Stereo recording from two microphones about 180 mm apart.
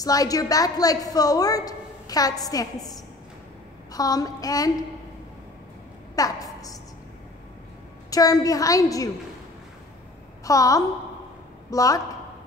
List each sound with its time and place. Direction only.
0.0 s a woman's voice: 20° left (ahead or behind)
6.1 s a sound: 20° left (ahead or behind)
8.1 s a woman's voice: 20° left (ahead or behind)
10.4 s a woman's voice: 20° left (ahead or behind)